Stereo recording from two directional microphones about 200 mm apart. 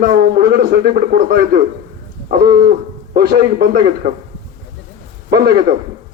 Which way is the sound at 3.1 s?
50° right (ahead or behind).